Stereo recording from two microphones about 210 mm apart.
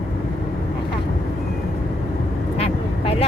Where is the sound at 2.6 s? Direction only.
30° left (ahead or behind).